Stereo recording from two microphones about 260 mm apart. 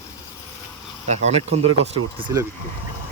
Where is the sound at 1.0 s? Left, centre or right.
Right.